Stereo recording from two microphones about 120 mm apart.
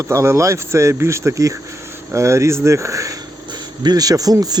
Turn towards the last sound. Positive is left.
turn(degrees=-30)  # may be behind; listen again after turning